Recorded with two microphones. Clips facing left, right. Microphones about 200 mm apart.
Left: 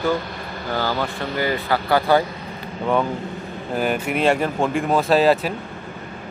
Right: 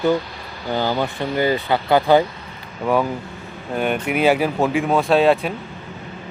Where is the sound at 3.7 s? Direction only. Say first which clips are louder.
Right 1 dB; centre (ahead or behind).